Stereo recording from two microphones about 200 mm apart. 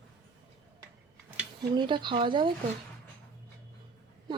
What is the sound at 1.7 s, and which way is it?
Speech, 25° right (ahead or behind).